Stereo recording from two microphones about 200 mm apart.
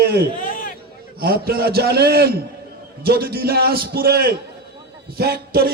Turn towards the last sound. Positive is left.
turn(degrees=-50)  # may be behind; listen again after turning